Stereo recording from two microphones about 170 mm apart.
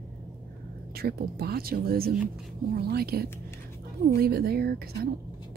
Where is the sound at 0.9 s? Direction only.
65° right (ahead or behind).